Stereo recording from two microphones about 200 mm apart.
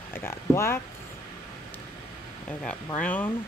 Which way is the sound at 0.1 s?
10° left (ahead or behind).